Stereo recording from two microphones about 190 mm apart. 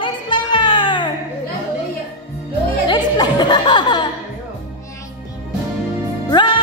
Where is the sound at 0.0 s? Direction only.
25° left (ahead or behind).